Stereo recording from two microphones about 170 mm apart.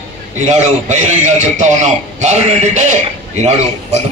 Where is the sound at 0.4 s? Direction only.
45° right (ahead or behind).